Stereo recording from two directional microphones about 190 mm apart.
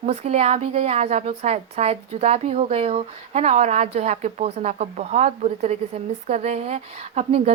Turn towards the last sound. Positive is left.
turn(degrees=-35)  # may be behind; listen again after turning